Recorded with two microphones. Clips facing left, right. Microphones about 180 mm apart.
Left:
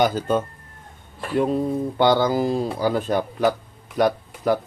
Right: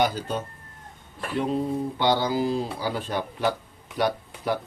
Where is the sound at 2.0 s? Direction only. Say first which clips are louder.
Left 6 dB; 50° left (ahead or behind).